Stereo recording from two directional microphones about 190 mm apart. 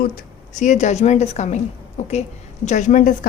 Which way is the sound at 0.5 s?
40° left (ahead or behind).